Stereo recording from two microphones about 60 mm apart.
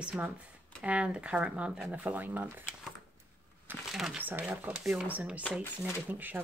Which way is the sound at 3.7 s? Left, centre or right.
Right.